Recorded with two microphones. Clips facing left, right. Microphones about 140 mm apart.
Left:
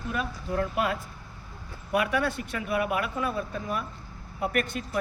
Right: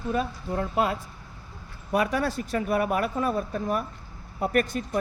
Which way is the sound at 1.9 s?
35° right (ahead or behind).